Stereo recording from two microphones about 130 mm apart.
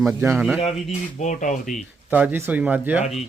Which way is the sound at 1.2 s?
75° left (ahead or behind).